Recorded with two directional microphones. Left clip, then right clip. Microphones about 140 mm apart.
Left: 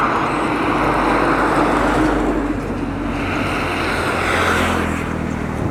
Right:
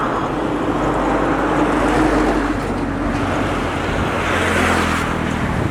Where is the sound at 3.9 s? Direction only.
30° left (ahead or behind).